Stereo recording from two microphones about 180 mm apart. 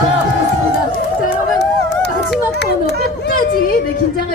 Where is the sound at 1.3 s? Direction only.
70° left (ahead or behind).